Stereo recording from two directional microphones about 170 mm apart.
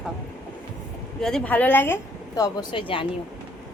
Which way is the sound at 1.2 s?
5° left (ahead or behind).